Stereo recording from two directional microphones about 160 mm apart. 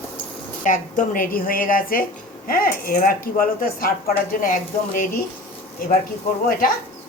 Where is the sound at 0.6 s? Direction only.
55° left (ahead or behind).